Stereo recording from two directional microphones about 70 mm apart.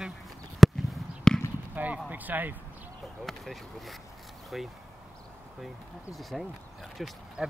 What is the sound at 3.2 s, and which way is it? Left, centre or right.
Speech, centre.